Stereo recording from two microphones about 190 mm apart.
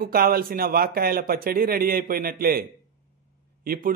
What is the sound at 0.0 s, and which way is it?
A man's voice, 50° right (ahead or behind).